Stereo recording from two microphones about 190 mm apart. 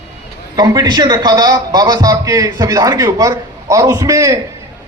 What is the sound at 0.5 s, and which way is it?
A man's voice, 20° right (ahead or behind).